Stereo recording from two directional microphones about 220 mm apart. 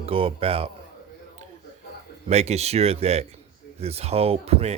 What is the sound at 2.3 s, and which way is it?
Speech, 30° right (ahead or behind).